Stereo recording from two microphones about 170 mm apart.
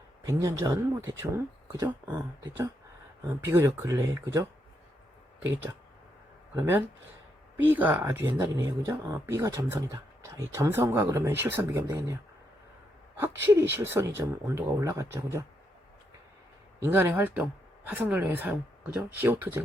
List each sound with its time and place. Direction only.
0.3 s speech: 20° right (ahead or behind)
3.2 s speech: 15° right (ahead or behind)
6.6 s speech: 15° right (ahead or behind)
13.4 s speech: 15° right (ahead or behind)
16.8 s speech: 15° right (ahead or behind)